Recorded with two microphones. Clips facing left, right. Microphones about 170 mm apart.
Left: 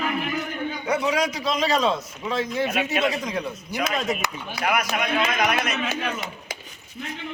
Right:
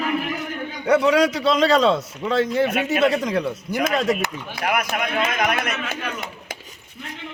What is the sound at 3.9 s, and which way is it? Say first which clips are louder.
Speech: right 6 dB; 90° right.